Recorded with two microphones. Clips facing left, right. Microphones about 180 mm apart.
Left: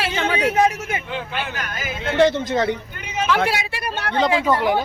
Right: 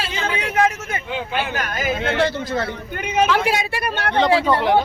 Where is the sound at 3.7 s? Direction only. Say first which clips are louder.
Right 3 dB; 55° right (ahead or behind).